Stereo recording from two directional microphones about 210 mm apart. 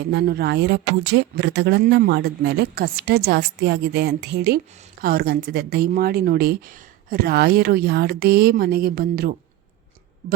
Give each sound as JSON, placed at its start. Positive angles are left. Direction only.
{"t": 0.1, "sound": "speech", "side_deg": -50}